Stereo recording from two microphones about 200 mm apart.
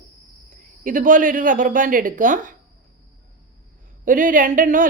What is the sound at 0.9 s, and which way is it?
A woman's voice, 40° right (ahead or behind).